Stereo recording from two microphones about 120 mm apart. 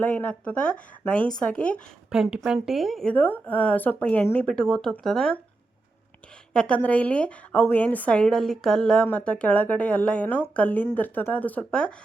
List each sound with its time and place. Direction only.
0.0 s a woman's voice: 15° left (ahead or behind)
2.0 s a woman's voice: 5° right (ahead or behind)
6.5 s a woman's voice: 10° left (ahead or behind)